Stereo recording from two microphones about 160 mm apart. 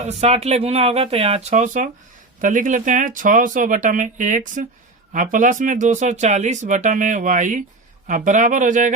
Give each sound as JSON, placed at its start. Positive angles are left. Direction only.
{"t": 0.0, "sound": "speech", "side_deg": -45}